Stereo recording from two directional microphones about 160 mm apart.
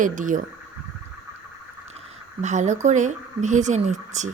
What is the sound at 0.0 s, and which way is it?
Speech, 55° right (ahead or behind).